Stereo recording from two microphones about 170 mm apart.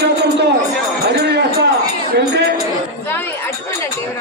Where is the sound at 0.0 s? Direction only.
80° right.